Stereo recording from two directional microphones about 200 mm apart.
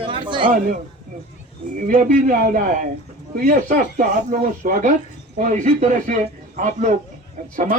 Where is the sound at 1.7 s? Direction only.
45° right (ahead or behind).